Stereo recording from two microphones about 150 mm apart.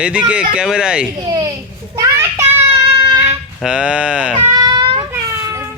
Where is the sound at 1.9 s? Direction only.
20° right (ahead or behind).